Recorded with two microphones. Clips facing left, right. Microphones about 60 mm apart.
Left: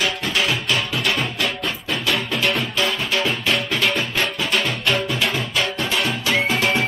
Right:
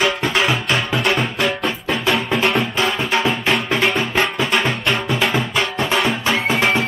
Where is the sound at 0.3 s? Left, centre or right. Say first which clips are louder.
Right 3 dB; right.